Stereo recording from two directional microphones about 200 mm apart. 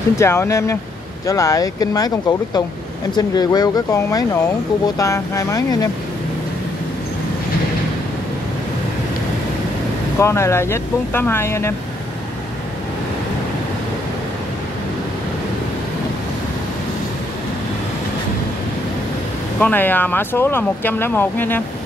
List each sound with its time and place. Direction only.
0.2 s speech: 15° left (ahead or behind)
10.1 s speech: 15° left (ahead or behind)
19.6 s speech: 10° left (ahead or behind)